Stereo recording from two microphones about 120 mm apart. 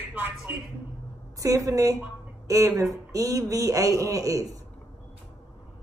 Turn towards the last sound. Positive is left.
turn(degrees=-25)  # may be behind; listen again after turning